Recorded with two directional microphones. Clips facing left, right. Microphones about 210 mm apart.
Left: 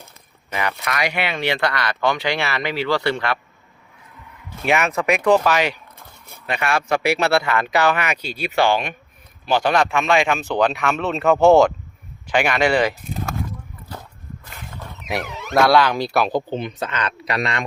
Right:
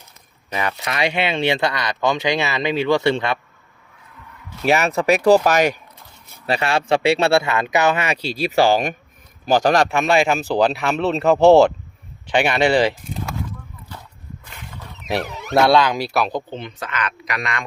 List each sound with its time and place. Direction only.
0.5 s speech: 30° right (ahead or behind)
4.6 s speech: 35° right (ahead or behind)
6.4 s speech: 30° right (ahead or behind)
15.5 s speech: 25° right (ahead or behind)
16.1 s speech: 5° left (ahead or behind)
16.8 s speech: 30° left (ahead or behind)